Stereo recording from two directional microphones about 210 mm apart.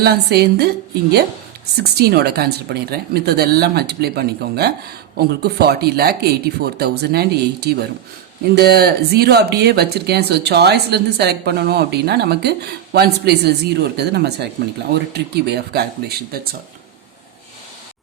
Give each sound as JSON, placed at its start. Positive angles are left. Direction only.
{"t": 0.0, "sound": "speech", "side_deg": -50}
{"t": 1.8, "sound": "speech", "side_deg": -50}